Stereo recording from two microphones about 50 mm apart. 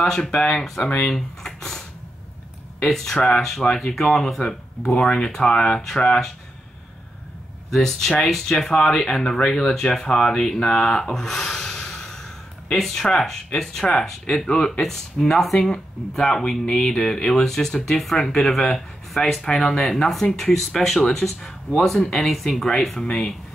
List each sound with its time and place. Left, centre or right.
0.0 s speech: centre
0.8 s speech: left
1.1 s speech: centre
7.7 s speech: centre